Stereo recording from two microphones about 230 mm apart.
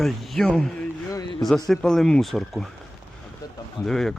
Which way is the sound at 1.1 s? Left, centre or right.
Centre.